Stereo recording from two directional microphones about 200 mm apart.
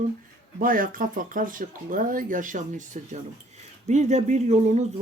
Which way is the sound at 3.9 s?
35° right (ahead or behind).